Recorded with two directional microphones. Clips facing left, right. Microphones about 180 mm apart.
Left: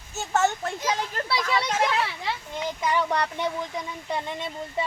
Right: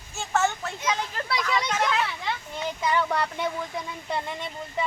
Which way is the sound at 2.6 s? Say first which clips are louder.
Even; 10° left (ahead or behind).